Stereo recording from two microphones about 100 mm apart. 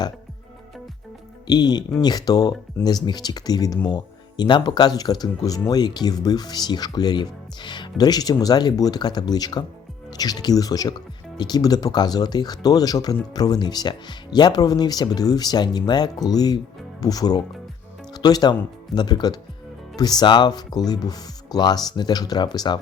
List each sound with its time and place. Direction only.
1.5 s speech: 45° left (ahead or behind)